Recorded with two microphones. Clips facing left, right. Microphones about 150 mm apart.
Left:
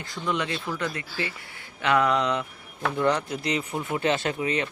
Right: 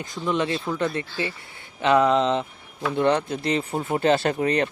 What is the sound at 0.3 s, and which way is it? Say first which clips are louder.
Speech: right 4 dB; 25° right (ahead or behind).